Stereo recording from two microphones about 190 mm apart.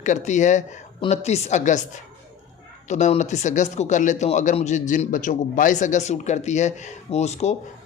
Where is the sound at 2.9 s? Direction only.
40° left (ahead or behind).